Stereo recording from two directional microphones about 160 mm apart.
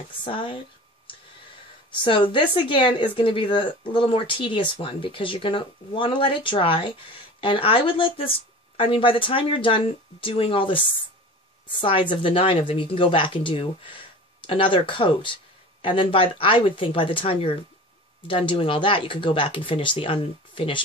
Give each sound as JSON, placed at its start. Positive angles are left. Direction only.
{"t": 0.2, "sound": "speech", "side_deg": 30}
{"t": 2.0, "sound": "speech", "side_deg": 30}